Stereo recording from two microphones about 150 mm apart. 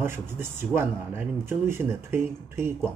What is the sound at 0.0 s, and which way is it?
Speech, 15° right (ahead or behind).